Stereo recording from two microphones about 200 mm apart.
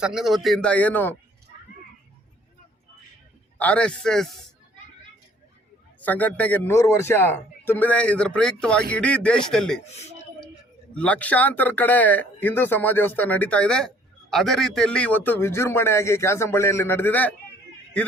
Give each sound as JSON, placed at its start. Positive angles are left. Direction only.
{"t": 0.0, "sound": "a man's voice", "side_deg": 0}
{"t": 3.6, "sound": "a man's voice", "side_deg": 5}
{"t": 6.0, "sound": "a man's voice", "side_deg": 10}
{"t": 9.8, "sound": "speech", "side_deg": 35}
{"t": 10.9, "sound": "speech", "side_deg": 5}